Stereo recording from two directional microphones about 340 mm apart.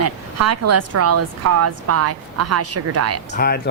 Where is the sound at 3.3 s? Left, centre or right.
Left.